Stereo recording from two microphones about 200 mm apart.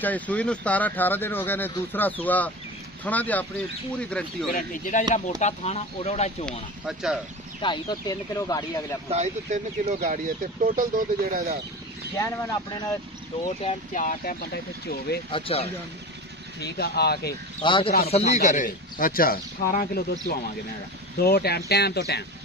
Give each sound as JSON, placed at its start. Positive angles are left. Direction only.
{"t": 0.0, "sound": "speech", "side_deg": 5}
{"t": 4.5, "sound": "speech", "side_deg": 40}
{"t": 6.9, "sound": "speech", "side_deg": -5}
{"t": 7.6, "sound": "speech", "side_deg": 20}
{"t": 9.1, "sound": "speech", "side_deg": -35}
{"t": 12.2, "sound": "speech", "side_deg": 15}
{"t": 13.9, "sound": "speech", "side_deg": 45}
{"t": 15.3, "sound": "speech", "side_deg": 30}
{"t": 16.6, "sound": "speech", "side_deg": 55}
{"t": 17.3, "sound": "speech", "side_deg": 25}